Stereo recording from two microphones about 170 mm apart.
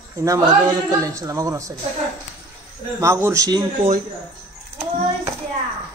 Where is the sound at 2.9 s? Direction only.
15° right (ahead or behind).